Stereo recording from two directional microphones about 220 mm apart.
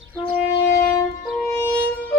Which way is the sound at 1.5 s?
10° left (ahead or behind).